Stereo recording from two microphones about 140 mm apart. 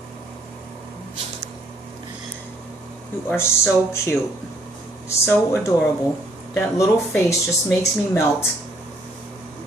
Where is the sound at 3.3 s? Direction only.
15° left (ahead or behind).